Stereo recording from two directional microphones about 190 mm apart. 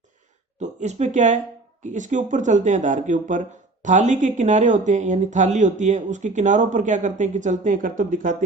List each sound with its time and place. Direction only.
0.6 s speech: 35° right (ahead or behind)